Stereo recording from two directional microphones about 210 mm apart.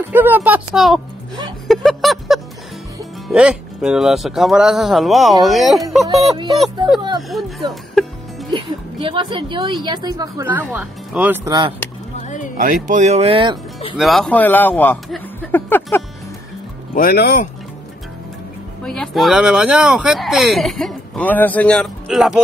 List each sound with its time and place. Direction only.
0.1 s speech: 10° right (ahead or behind)
1.7 s a sound: centre (ahead or behind)
3.3 s speech: 5° right (ahead or behind)
7.2 s music: centre (ahead or behind)
8.5 s a woman's voice: 25° right (ahead or behind); by 11.3 s 5° right (ahead or behind)
11.4 s a woman's voice: 20° right (ahead or behind)
12.2 s a sound: 35° left (ahead or behind)
12.5 s speech: 40° right (ahead or behind)
13.9 s speech: centre (ahead or behind)
16.9 s speech: 45° left (ahead or behind)
18.9 s speech: centre (ahead or behind)